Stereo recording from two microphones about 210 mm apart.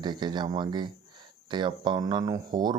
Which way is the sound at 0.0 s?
20° right (ahead or behind).